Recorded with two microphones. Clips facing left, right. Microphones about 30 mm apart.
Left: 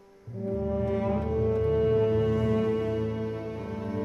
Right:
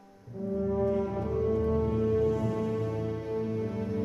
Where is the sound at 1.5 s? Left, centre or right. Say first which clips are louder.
Left 7 dB; left.